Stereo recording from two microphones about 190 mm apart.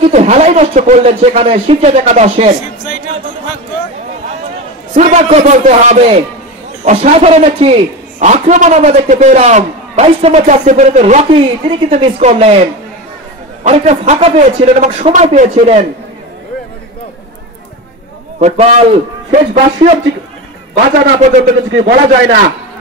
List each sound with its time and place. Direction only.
0.0 s a man's voice: 35° right (ahead or behind)
4.9 s a man's voice: 40° right (ahead or behind)
13.7 s a man's voice: 35° right (ahead or behind)
18.4 s a man's voice: 35° right (ahead or behind)
21.7 s a man's voice: 90° right